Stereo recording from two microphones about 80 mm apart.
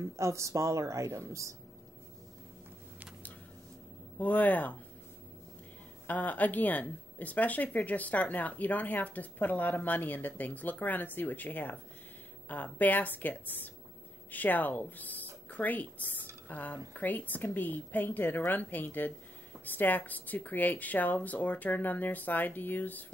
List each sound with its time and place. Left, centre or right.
0.0 s a woman's voice: right
4.2 s speech: left
6.0 s speech: left